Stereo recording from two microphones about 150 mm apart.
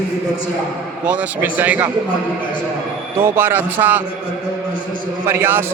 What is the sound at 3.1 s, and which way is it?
Speech, 15° right (ahead or behind).